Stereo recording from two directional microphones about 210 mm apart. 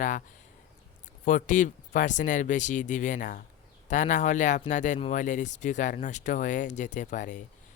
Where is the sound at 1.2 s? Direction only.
40° left (ahead or behind).